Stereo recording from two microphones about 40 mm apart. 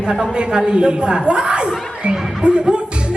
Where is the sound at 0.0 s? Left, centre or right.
Right.